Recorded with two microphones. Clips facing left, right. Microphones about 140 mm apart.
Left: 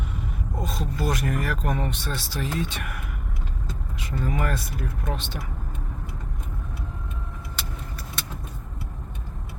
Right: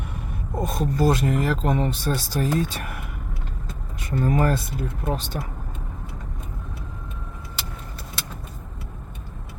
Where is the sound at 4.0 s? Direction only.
50° right (ahead or behind); by 5.1 s 30° right (ahead or behind).